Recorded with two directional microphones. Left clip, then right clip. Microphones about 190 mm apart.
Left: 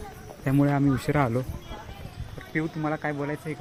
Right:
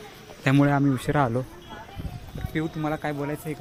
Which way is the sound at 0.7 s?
5° right (ahead or behind).